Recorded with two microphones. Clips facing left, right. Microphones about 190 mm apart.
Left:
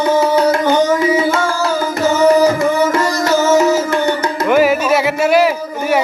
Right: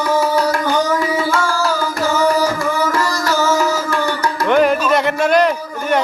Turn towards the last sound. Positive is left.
turn(degrees=5)  # may be behind; listen again after turning